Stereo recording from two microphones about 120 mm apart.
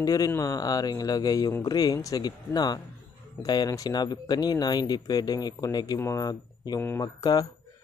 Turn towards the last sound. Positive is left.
turn(degrees=30)  # may be behind; listen again after turning